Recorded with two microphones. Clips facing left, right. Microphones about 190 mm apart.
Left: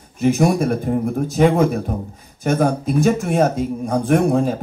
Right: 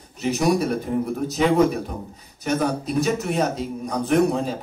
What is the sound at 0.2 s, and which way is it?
A man's voice, 50° left (ahead or behind).